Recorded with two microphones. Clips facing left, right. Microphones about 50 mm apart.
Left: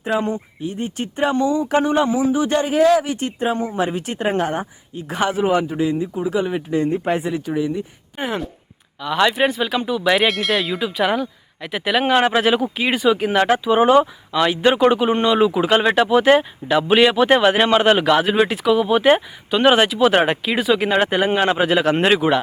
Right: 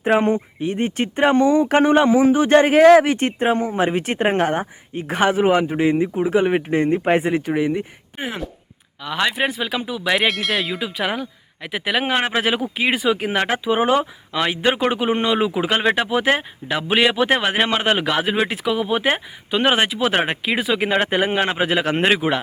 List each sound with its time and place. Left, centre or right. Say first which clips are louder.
0.0 s speech: right 4 dB; right
8.2 s speech: left 3 dB; centre
11.1 s speech: left 5 dB; centre
13.3 s speech: left 4 dB; centre
21.3 s speech: left 3 dB; centre